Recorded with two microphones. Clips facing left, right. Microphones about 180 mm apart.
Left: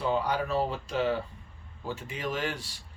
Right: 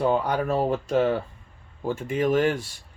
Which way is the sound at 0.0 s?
50° right (ahead or behind).